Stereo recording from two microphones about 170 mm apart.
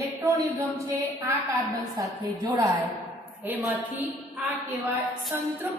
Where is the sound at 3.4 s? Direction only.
10° right (ahead or behind).